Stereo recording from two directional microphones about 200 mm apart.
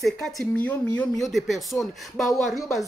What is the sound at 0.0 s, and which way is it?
Speech, centre (ahead or behind).